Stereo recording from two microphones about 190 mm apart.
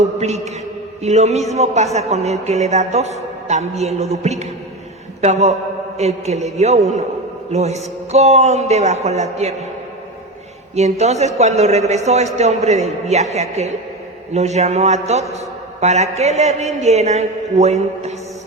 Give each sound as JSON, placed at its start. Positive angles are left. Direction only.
{"t": 0.0, "sound": "mantra", "side_deg": -35}
{"t": 1.0, "sound": "a man's voice", "side_deg": -35}
{"t": 10.8, "sound": "a man's voice", "side_deg": -35}